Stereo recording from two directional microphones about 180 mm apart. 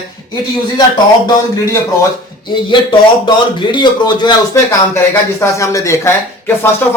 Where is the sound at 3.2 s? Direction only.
25° left (ahead or behind).